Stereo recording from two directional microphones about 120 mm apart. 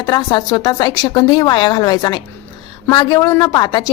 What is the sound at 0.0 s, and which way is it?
A woman's voice, 35° left (ahead or behind).